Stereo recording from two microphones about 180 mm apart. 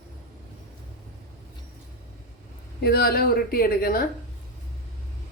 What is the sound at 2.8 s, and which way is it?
A woman's voice, 60° left (ahead or behind).